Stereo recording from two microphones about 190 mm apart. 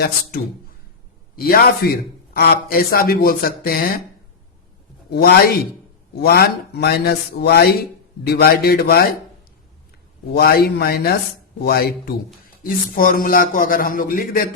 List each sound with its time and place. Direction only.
1.4 s speech: 50° left (ahead or behind)
5.1 s speech: 55° left (ahead or behind)
10.3 s speech: 55° left (ahead or behind)